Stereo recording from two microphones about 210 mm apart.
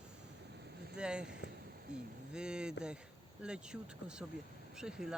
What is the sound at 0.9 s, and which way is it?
Speech, 5° right (ahead or behind).